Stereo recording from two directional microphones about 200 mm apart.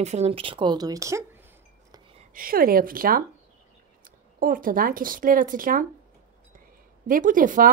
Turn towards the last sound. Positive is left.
turn(degrees=-40)  # may be behind; listen again after turning